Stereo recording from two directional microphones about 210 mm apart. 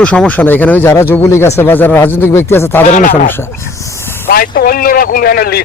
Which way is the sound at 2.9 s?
40° left (ahead or behind).